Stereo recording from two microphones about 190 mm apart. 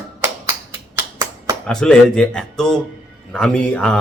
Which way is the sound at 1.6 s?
5° left (ahead or behind).